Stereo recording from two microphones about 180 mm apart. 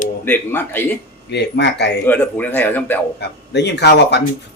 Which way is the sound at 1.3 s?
70° left (ahead or behind).